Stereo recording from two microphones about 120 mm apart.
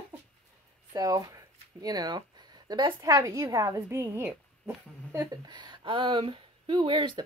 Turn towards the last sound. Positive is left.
turn(degrees=-40)  # may be behind; listen again after turning